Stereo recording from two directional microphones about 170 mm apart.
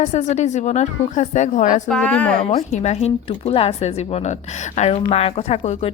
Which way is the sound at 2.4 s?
45° left (ahead or behind).